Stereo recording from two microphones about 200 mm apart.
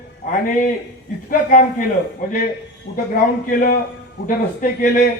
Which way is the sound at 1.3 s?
45° left (ahead or behind).